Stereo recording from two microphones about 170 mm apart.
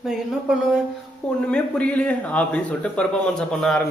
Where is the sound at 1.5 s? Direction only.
5° left (ahead or behind).